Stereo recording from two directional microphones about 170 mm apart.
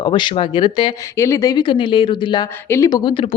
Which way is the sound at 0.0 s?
25° left (ahead or behind).